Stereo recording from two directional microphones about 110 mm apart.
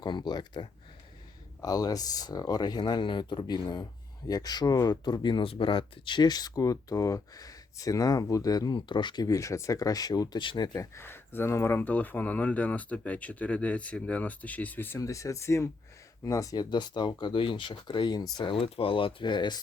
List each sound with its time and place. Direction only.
0.0 s speech: 40° left (ahead or behind)
10.9 s speech: 20° left (ahead or behind); by 19.5 s 45° left (ahead or behind)